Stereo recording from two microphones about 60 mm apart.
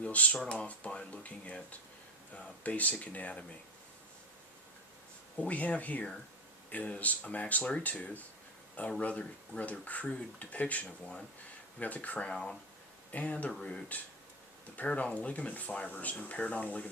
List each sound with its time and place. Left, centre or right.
0.0 s speech: left
5.4 s speech: left